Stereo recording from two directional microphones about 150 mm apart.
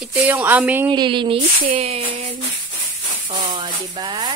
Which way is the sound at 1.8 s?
45° right (ahead or behind).